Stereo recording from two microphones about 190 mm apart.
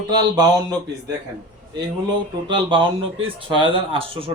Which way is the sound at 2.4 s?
25° right (ahead or behind).